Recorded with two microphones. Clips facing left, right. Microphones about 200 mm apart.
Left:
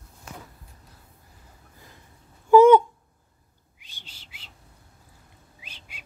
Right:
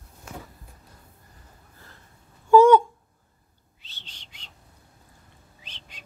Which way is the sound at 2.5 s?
20° left (ahead or behind).